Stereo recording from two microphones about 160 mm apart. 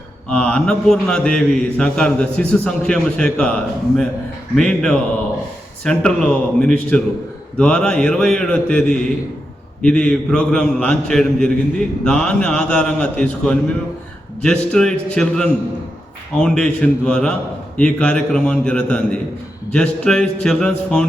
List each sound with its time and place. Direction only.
0.3 s a man's voice: 5° left (ahead or behind)